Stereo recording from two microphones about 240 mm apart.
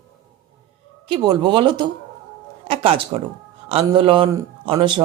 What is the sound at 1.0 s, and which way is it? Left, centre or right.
Speech, centre.